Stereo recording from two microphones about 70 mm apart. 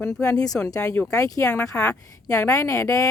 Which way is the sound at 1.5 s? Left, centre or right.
Centre.